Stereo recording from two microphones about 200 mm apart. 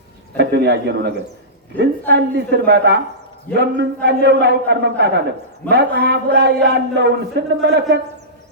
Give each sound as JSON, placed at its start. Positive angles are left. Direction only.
{"t": 0.3, "sound": "a man's voice", "side_deg": -55}